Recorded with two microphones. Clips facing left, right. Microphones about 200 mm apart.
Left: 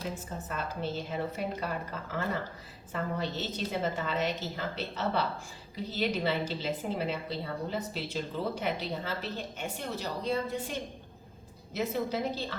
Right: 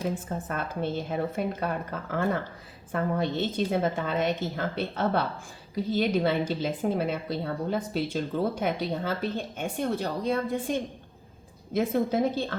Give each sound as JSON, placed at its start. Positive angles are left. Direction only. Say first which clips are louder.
{"t": 0.1, "sound": "a woman's voice", "louder": "right 6 dB", "side_deg": -55}
{"t": 11.7, "sound": "a woman's voice", "louder": "right 6 dB", "side_deg": -50}